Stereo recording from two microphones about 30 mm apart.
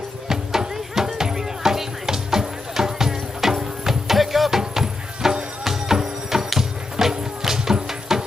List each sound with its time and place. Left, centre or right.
0.3 s music: centre